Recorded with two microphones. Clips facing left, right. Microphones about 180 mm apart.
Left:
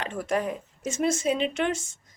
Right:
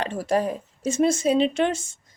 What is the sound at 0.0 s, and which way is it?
Speech, 35° right (ahead or behind).